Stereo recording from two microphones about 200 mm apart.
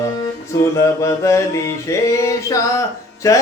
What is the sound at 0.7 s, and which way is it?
Music, 15° left (ahead or behind).